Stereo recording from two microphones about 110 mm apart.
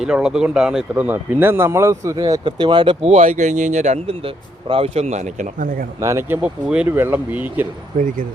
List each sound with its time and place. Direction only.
0.0 s speech: 5° right (ahead or behind); by 3.0 s 45° right (ahead or behind)
3.0 s speech: 90° right
6.0 s speech: 25° right (ahead or behind)